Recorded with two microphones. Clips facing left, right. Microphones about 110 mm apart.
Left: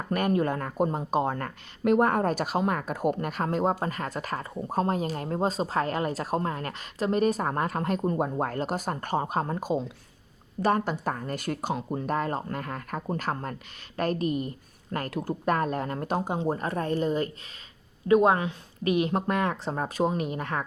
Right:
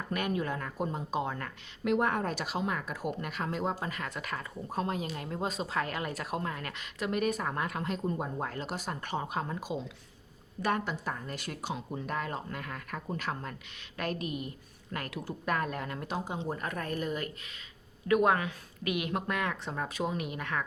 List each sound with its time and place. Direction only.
0.1 s speech: 45° left (ahead or behind)
16.6 s speech: 30° left (ahead or behind)